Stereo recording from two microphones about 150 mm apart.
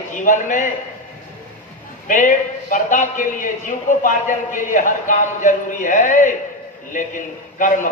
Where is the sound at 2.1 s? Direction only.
60° left (ahead or behind).